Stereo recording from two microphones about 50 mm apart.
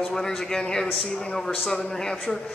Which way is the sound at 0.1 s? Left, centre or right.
Centre.